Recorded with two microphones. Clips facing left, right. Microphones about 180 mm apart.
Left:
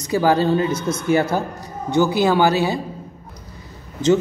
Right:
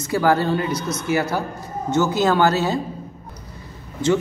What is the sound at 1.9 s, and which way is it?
Speech, 10° left (ahead or behind).